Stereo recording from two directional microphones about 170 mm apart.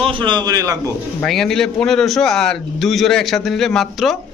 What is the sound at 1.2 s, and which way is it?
A man's voice, centre (ahead or behind).